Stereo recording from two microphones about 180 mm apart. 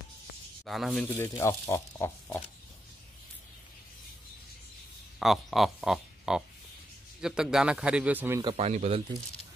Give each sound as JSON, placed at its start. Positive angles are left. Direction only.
{"t": 0.7, "sound": "a man's voice", "side_deg": 0}
{"t": 1.0, "sound": "speech", "side_deg": 15}
{"t": 5.2, "sound": "a man's voice", "side_deg": 0}
{"t": 8.5, "sound": "speech", "side_deg": -35}